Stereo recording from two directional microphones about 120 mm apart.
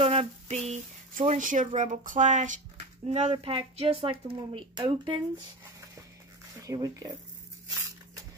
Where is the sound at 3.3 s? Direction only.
50° right (ahead or behind).